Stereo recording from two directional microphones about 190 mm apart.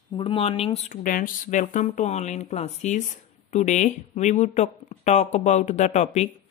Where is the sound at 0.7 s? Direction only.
40° left (ahead or behind).